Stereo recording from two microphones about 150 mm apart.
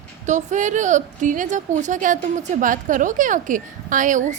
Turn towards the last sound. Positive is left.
turn(degrees=-60)  # may be behind; listen again after turning